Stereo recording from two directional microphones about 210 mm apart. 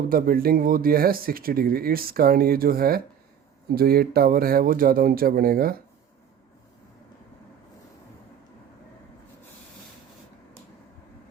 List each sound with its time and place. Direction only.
0.1 s speech: 45° right (ahead or behind)